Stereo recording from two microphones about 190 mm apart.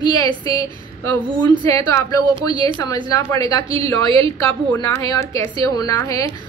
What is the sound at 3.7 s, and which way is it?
Speech, 30° right (ahead or behind).